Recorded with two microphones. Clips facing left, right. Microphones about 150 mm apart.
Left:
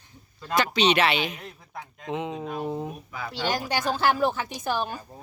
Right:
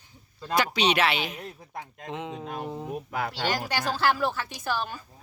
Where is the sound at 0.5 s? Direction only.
10° right (ahead or behind).